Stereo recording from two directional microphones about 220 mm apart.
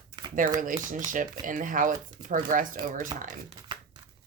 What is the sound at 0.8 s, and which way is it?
Speech, 35° right (ahead or behind).